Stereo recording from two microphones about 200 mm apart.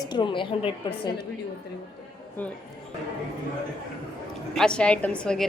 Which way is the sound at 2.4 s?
10° left (ahead or behind).